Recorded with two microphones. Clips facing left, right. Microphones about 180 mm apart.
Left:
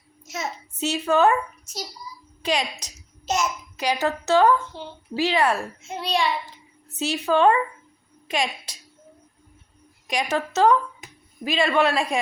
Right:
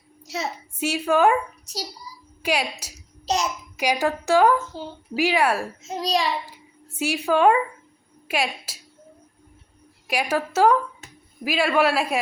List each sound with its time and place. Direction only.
0.3 s a child's voice: 35° right (ahead or behind)
0.7 s a woman's voice: 10° right (ahead or behind)
1.7 s a child's voice: 35° right (ahead or behind)
2.4 s a woman's voice: 10° right (ahead or behind)
4.7 s a child's voice: 40° right (ahead or behind)
5.1 s a woman's voice: 10° right (ahead or behind)
5.8 s a child's voice: 40° right (ahead or behind)
6.4 s a woman's voice: 10° right (ahead or behind)
10.1 s a woman's voice: 5° right (ahead or behind)